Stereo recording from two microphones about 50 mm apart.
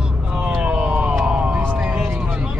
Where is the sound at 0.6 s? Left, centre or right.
Right.